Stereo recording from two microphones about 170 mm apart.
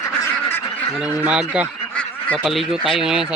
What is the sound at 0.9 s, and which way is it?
Speech, 5° right (ahead or behind).